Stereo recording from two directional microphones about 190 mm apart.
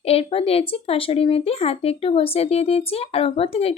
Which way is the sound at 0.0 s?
30° left (ahead or behind).